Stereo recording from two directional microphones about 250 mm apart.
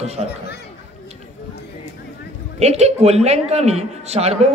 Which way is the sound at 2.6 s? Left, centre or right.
Right.